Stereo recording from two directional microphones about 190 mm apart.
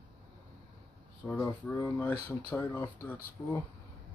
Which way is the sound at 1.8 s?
10° left (ahead or behind).